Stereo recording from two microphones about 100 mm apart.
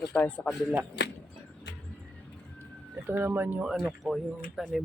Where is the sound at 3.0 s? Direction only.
20° right (ahead or behind).